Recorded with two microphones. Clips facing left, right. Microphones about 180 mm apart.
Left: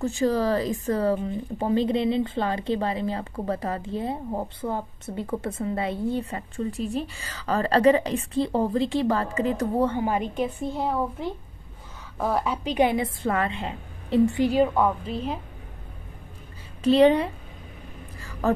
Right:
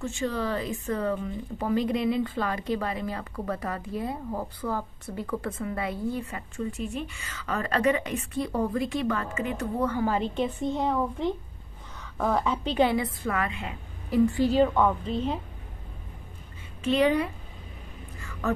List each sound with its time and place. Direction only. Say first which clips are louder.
0.0 s speech: left 6 dB; 35° left (ahead or behind); by 10.2 s 20° left (ahead or behind)
10.3 s a woman's voice: even; 5° left (ahead or behind)
16.8 s a woman's voice: left 6 dB; 30° left (ahead or behind)
18.2 s a sound: left 5 dB; 35° left (ahead or behind)